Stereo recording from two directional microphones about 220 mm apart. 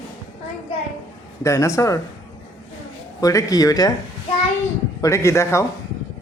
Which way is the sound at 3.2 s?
15° left (ahead or behind).